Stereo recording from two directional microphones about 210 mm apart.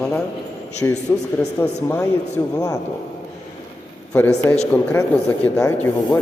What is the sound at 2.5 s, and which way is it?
Speech, 15° left (ahead or behind).